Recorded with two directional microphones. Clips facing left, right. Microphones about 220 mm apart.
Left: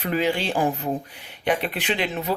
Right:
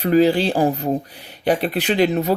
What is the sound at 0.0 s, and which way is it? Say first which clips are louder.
Speech: right 8 dB; 35° right (ahead or behind).